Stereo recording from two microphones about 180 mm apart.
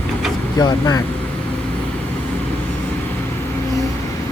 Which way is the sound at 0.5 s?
20° left (ahead or behind).